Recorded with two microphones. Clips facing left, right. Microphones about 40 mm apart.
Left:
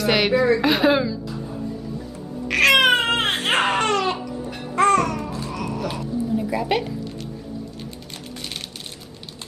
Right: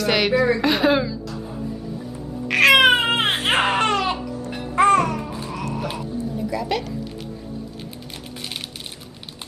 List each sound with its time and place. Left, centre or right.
0.0 s a woman's voice: centre
2.4 s baby cry: centre
5.8 s a sound: centre
6.3 s a woman's voice: centre